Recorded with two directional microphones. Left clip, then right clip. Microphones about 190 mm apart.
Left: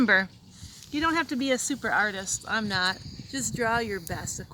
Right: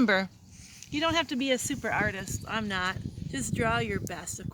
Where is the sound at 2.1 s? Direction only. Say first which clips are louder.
Left 4 dB; 10° right (ahead or behind).